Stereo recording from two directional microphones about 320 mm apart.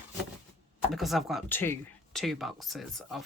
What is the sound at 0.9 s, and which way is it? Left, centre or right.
Speech, centre.